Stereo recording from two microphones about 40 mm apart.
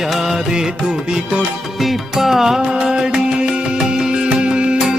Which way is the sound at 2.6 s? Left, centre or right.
Right.